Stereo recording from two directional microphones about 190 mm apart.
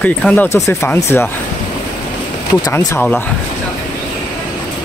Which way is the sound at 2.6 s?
15° left (ahead or behind).